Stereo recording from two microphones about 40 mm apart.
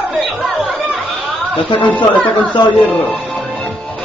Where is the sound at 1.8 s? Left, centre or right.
Left.